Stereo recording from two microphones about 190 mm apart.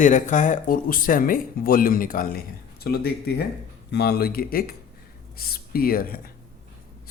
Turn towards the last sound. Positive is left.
turn(degrees=50)  # may be behind; listen again after turning